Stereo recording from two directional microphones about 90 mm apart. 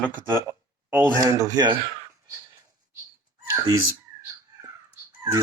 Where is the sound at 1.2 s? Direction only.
40° right (ahead or behind).